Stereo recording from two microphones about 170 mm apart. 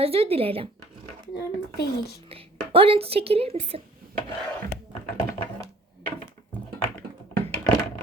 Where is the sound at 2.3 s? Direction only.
35° right (ahead or behind).